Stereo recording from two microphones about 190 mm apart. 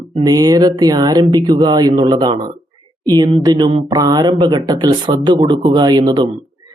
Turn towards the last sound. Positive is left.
turn(degrees=-20)  # may be behind; listen again after turning